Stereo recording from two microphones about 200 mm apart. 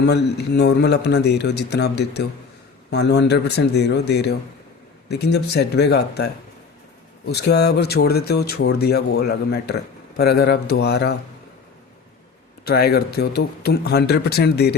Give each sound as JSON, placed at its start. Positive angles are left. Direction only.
{"t": 0.0, "sound": "a man's voice", "side_deg": 55}
{"t": 7.3, "sound": "speech", "side_deg": 55}
{"t": 12.6, "sound": "speech", "side_deg": 50}